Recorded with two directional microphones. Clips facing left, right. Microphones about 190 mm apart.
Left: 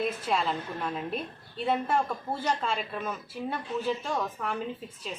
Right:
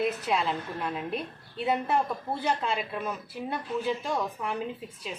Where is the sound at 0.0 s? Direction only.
Centre (ahead or behind).